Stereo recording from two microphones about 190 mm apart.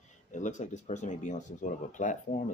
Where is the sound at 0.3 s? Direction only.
40° left (ahead or behind).